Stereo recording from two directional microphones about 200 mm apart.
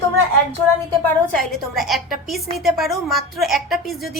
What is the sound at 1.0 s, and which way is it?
A woman's voice, 5° left (ahead or behind).